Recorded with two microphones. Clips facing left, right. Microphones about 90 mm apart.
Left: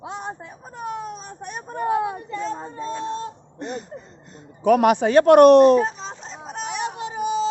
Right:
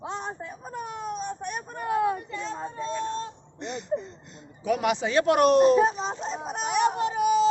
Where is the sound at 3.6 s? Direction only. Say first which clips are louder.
Right 2 dB; 45° left (ahead or behind); by 5.7 s 60° left (ahead or behind).